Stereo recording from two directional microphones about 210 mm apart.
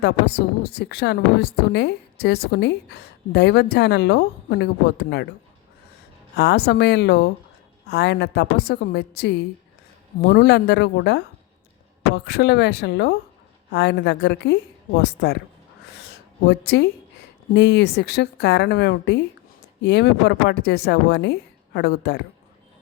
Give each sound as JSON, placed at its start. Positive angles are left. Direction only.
{"t": 0.0, "sound": "a woman's voice", "side_deg": 50}
{"t": 6.3, "sound": "a woman's voice", "side_deg": 50}
{"t": 16.5, "sound": "a woman's voice", "side_deg": 55}